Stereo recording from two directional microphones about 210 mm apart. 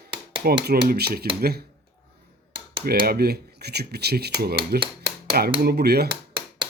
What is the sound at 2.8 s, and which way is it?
Speech, 45° right (ahead or behind).